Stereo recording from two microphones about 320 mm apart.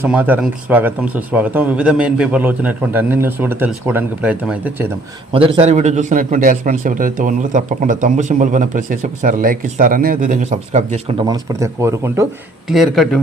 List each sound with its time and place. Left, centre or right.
0.0 s speech: centre
5.3 s a man's voice: centre